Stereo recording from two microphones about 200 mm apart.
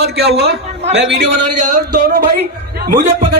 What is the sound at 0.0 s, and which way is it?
Speech, 55° right (ahead or behind).